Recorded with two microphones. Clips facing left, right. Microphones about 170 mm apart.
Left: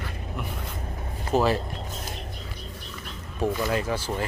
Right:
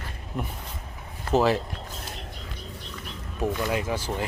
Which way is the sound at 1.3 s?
25° right (ahead or behind).